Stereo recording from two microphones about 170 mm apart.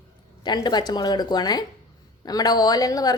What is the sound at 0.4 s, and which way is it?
A woman's voice, 25° left (ahead or behind).